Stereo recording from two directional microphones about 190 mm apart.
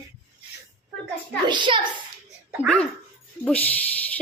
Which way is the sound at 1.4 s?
25° right (ahead or behind).